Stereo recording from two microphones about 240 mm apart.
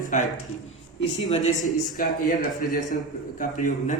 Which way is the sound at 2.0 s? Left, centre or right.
Left.